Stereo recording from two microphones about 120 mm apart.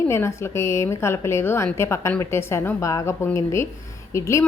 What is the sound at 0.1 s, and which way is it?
A woman's voice, 20° left (ahead or behind).